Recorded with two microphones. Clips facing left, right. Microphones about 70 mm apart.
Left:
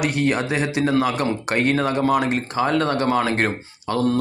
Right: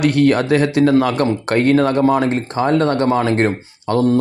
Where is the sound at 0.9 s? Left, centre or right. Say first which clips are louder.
Right 5 dB; right.